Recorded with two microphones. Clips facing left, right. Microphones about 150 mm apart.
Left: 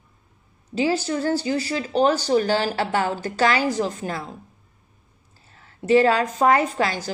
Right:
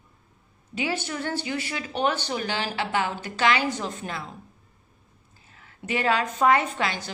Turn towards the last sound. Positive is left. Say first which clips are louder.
# left 5 dB
turn(degrees=35)  # may be behind; listen again after turning